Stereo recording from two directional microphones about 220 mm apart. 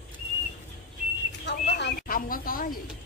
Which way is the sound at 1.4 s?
50° left (ahead or behind).